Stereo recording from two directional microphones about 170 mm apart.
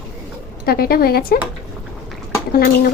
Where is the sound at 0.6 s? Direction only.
65° left (ahead or behind).